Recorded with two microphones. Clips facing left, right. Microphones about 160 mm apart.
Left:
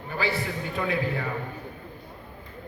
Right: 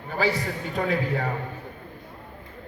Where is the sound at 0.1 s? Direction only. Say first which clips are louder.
Right 3 dB; 40° right (ahead or behind).